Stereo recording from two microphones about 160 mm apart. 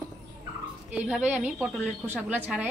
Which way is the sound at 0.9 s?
5° right (ahead or behind).